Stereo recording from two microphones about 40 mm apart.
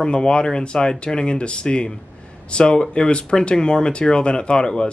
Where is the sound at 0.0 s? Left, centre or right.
Left.